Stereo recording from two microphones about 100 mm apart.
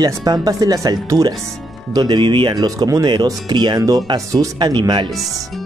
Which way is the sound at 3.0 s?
50° right (ahead or behind).